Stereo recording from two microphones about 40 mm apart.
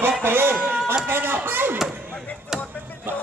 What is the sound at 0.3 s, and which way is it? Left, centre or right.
Speech, right.